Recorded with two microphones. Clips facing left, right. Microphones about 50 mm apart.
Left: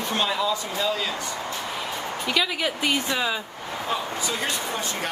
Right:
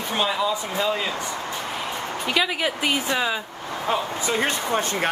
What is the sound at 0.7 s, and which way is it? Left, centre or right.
Speech, right.